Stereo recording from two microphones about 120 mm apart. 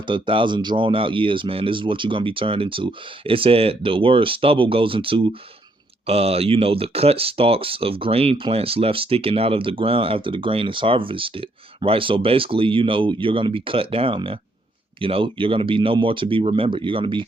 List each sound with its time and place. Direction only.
0.1 s speech: 45° right (ahead or behind)